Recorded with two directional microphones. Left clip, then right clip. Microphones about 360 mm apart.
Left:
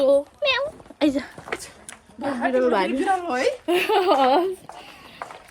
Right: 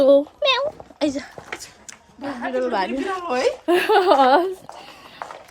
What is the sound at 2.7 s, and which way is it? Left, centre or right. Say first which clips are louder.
A woman's voice: left 2 dB; centre.